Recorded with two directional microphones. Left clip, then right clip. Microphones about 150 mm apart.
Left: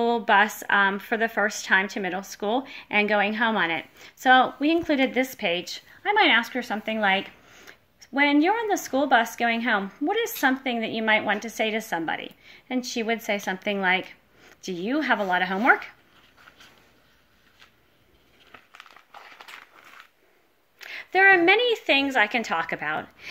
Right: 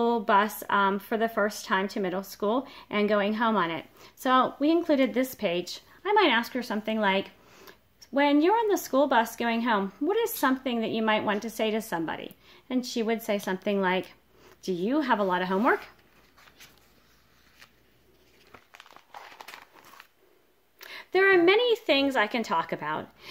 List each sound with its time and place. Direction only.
0.0 s speech: 40° right (ahead or behind)
20.9 s speech: 45° right (ahead or behind)